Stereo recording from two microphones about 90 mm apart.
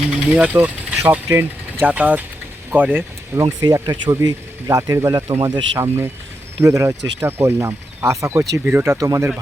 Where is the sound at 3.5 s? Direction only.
50° right (ahead or behind).